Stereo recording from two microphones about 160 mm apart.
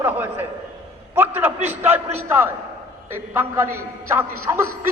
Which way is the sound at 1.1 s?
15° right (ahead or behind).